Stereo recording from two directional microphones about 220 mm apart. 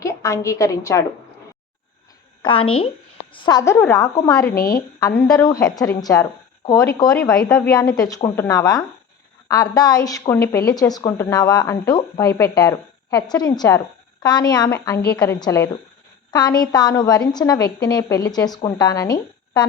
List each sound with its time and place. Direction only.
0.0 s a woman's voice: 15° left (ahead or behind)
2.4 s a woman's voice: 25° left (ahead or behind)
4.5 s a woman's voice: 45° left (ahead or behind)
4.9 s a woman's voice: 15° left (ahead or behind)